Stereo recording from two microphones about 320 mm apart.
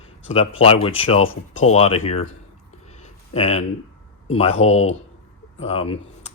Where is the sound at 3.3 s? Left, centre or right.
Centre.